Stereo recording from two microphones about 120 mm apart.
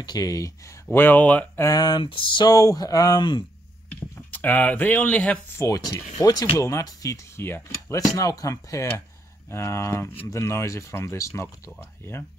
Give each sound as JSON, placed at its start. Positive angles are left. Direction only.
{"t": 0.0, "sound": "speech", "side_deg": 30}
{"t": 0.8, "sound": "speech", "side_deg": 15}
{"t": 1.7, "sound": "speech", "side_deg": 35}
{"t": 4.3, "sound": "speech", "side_deg": 15}
{"t": 5.6, "sound": "speech", "side_deg": 25}